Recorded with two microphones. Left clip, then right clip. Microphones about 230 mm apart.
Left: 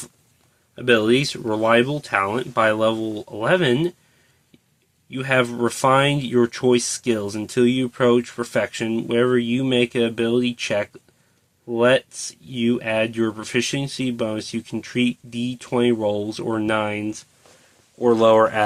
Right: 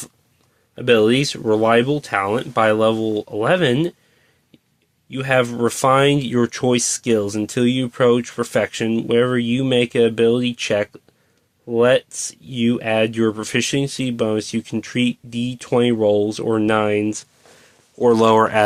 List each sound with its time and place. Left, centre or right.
0.8 s speech: right
5.1 s speech: right